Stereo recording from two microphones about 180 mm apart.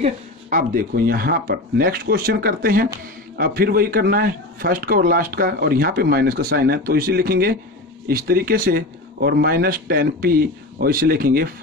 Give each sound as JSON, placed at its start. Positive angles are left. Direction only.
{"t": 0.0, "sound": "speech", "side_deg": -45}